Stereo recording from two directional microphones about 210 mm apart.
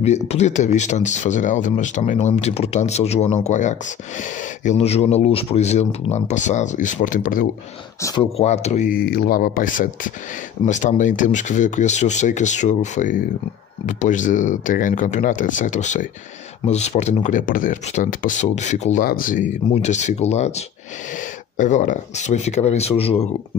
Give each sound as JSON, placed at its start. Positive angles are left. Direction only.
{"t": 0.0, "sound": "speech", "side_deg": 30}
{"t": 8.0, "sound": "speech", "side_deg": 15}
{"t": 8.4, "sound": "speech", "side_deg": 30}